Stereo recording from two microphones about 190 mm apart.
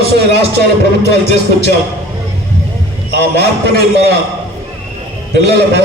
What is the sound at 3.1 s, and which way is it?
A man's voice, 60° right (ahead or behind).